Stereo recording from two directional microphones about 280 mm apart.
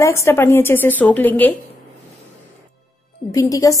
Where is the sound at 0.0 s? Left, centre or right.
Centre.